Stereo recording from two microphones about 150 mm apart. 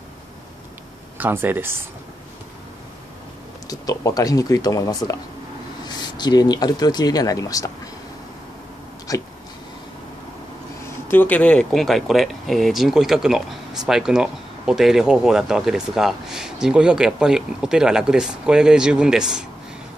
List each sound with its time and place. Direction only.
1.1 s speech: 10° right (ahead or behind)
3.6 s speech: 25° left (ahead or behind)
9.1 s a sound: 25° left (ahead or behind)
11.1 s speech: 10° left (ahead or behind); by 19.4 s 5° right (ahead or behind)